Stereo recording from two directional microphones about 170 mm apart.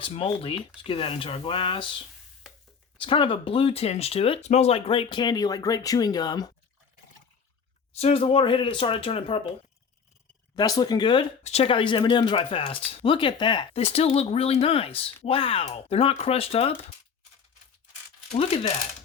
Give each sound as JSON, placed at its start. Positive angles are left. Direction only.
{"t": 0.0, "sound": "speech", "side_deg": 35}
{"t": 3.0, "sound": "speech", "side_deg": 30}
{"t": 7.9, "sound": "speech", "side_deg": 35}
{"t": 10.5, "sound": "speech", "side_deg": 25}
{"t": 18.3, "sound": "speech", "side_deg": 35}